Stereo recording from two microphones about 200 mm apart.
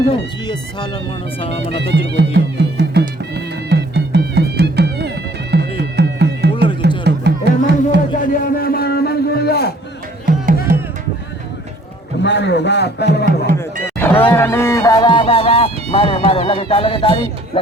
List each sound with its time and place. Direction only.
1.4 s speech: 30° left (ahead or behind)
1.7 s music: 60° right (ahead or behind)
8.2 s a sound: 45° left (ahead or behind)
12.2 s a man's voice: 60° left (ahead or behind)
13.8 s speech: 10° left (ahead or behind); by 17.6 s 25° left (ahead or behind)